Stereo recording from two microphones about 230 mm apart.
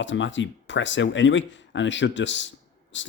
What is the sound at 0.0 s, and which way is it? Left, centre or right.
Speech, left.